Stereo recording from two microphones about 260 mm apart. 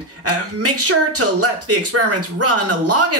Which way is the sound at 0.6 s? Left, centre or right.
Right.